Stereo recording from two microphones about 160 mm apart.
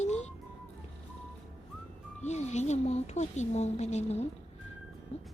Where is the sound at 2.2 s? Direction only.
45° left (ahead or behind).